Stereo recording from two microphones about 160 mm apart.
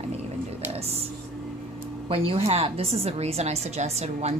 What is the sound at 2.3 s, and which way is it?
A woman's voice, 40° right (ahead or behind).